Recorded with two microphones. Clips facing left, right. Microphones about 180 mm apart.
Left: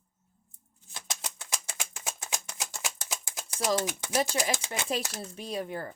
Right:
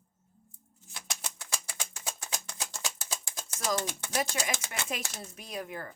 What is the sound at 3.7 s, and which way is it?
Speech, 10° left (ahead or behind).